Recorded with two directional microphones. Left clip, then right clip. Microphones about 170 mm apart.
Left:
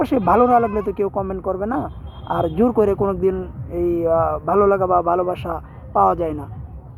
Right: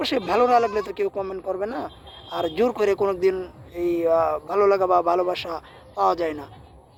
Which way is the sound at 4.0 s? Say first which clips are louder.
Left 1 dB; 10° right (ahead or behind).